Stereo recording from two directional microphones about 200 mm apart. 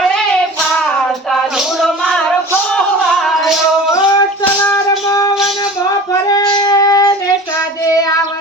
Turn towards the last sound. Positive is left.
turn(degrees=20)  # may be behind; listen again after turning